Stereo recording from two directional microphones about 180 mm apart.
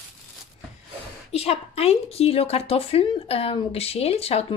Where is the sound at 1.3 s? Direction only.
35° left (ahead or behind).